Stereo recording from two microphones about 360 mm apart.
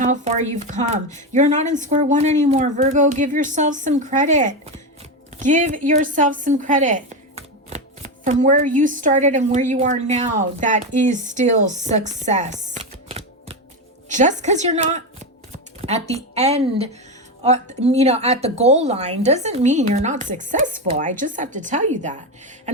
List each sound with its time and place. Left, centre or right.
0.0 s a woman's voice: centre